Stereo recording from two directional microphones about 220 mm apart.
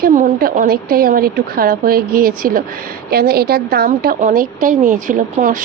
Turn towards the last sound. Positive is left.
turn(degrees=-40)  # may be behind; listen again after turning